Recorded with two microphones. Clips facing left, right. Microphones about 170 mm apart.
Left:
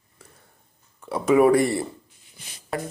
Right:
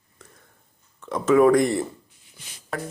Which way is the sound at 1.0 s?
10° left (ahead or behind).